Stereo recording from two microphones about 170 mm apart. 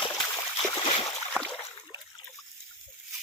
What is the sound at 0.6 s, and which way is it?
Splash, 30° left (ahead or behind).